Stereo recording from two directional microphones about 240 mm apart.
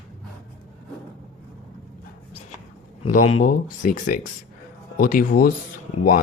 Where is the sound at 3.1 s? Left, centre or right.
Left.